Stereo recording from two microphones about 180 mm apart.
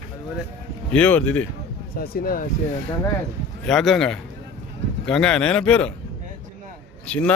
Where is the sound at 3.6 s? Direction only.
Centre (ahead or behind).